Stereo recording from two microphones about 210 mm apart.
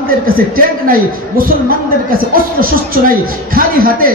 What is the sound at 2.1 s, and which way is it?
A woman's voice, 45° right (ahead or behind).